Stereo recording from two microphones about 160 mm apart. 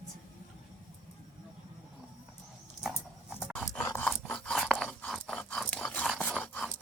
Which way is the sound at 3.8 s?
15° left (ahead or behind).